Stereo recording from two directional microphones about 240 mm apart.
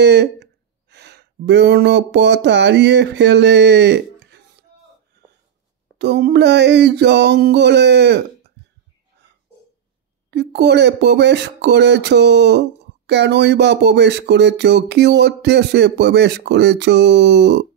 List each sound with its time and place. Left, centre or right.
0.0 s speech: right
5.9 s speech: right
10.3 s speech: right